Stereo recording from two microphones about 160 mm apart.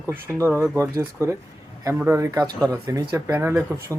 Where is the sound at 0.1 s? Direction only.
15° right (ahead or behind).